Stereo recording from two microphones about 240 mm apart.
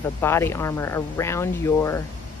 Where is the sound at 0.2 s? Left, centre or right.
Centre.